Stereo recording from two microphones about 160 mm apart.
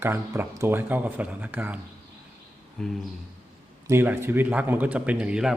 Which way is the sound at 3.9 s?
15° right (ahead or behind).